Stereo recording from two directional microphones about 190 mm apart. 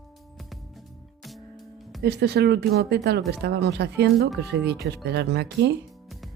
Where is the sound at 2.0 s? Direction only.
60° right (ahead or behind).